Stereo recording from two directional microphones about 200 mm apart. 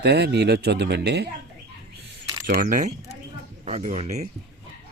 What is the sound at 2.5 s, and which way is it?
Speech, 45° right (ahead or behind).